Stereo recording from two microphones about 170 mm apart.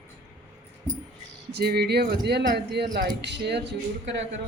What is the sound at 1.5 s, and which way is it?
Speech, 70° right (ahead or behind).